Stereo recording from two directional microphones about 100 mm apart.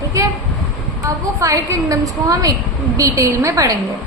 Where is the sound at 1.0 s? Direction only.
35° right (ahead or behind).